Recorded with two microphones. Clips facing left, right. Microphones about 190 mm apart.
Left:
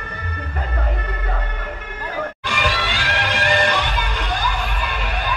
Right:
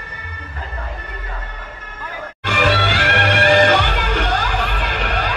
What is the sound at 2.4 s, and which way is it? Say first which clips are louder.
Music: right 9 dB; 60° right (ahead or behind).